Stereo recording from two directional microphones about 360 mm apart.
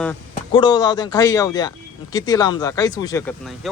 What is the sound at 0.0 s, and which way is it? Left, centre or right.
Speech, centre.